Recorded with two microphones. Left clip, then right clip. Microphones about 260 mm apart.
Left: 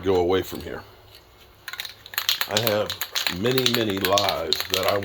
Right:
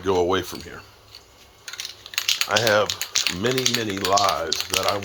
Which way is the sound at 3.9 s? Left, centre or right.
Centre.